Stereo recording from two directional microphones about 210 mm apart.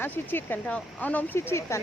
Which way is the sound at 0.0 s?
10° left (ahead or behind).